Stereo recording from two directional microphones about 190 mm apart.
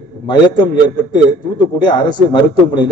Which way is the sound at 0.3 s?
25° left (ahead or behind).